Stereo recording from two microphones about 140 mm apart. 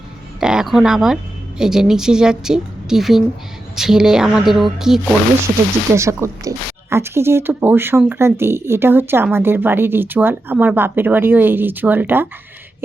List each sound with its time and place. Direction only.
0.3 s a woman's voice: 5° right (ahead or behind)
5.9 s speech: 20° right (ahead or behind)